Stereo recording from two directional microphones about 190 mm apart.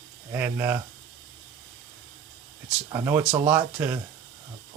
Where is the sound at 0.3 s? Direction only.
10° right (ahead or behind).